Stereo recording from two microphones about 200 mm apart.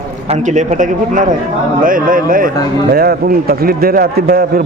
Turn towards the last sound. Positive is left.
turn(degrees=-50)  # may be behind; listen again after turning